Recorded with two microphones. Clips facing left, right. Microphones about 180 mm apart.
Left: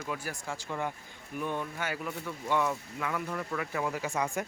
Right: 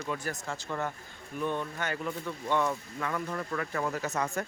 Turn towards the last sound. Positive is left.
turn(degrees=15)  # may be behind; listen again after turning